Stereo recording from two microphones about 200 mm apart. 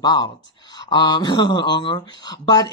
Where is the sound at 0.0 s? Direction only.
20° left (ahead or behind).